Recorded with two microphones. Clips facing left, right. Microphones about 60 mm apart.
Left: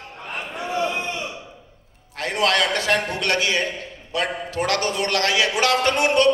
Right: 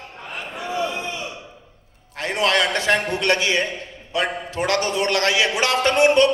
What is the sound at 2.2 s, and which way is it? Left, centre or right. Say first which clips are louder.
Speech: right 1 dB; right.